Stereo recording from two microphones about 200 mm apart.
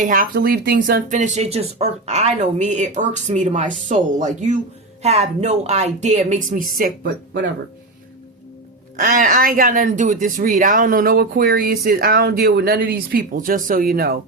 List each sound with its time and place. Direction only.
0.0 s speech: 45° right (ahead or behind)
9.0 s speech: 45° right (ahead or behind)